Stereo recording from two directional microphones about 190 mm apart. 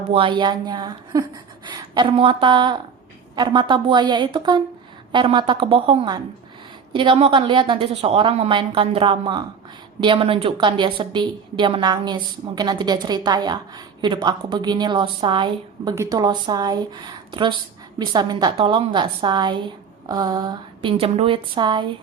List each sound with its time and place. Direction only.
0.1 s a woman's voice: 25° right (ahead or behind)